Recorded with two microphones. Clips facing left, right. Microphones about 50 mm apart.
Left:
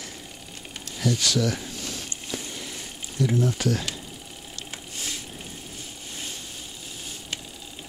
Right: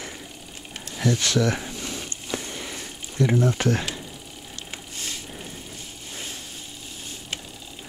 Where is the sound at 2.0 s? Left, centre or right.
Right.